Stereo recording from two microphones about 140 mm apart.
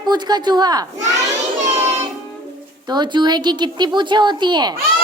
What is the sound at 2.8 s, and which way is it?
A woman's voice, 30° right (ahead or behind).